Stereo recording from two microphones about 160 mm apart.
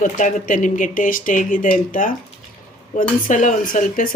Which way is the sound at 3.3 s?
50° left (ahead or behind).